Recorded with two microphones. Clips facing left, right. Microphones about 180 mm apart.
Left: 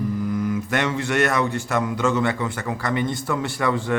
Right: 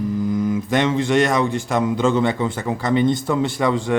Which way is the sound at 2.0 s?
30° right (ahead or behind).